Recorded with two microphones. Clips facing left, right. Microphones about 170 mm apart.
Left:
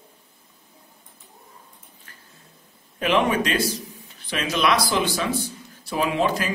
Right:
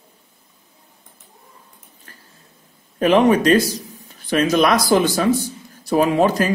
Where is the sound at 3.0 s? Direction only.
40° right (ahead or behind).